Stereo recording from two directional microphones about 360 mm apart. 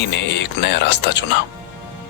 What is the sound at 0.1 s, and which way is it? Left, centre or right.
Speech, left.